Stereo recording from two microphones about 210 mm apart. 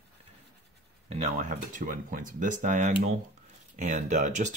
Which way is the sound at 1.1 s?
35° right (ahead or behind).